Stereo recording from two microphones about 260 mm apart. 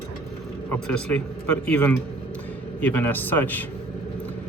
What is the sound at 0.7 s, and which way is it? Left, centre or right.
Speech, centre.